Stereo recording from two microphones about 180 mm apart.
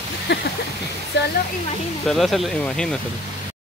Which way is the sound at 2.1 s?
Centre (ahead or behind).